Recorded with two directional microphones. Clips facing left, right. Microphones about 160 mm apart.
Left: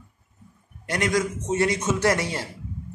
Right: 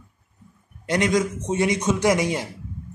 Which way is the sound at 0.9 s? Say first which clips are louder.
Right 3 dB; 20° right (ahead or behind).